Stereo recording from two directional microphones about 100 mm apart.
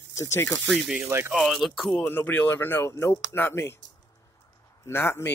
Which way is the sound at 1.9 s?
20° left (ahead or behind).